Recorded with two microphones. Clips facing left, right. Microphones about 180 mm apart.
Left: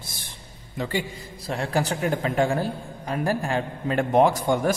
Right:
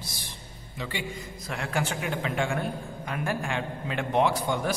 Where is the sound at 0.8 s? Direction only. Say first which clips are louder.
Left 6 dB; 45° left (ahead or behind).